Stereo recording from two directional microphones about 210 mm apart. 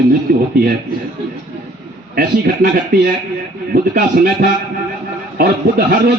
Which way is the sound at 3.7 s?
45° right (ahead or behind).